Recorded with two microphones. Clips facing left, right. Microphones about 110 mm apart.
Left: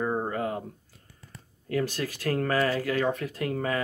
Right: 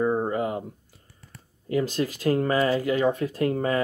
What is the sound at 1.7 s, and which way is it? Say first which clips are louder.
Speech: right 4 dB; 20° right (ahead or behind).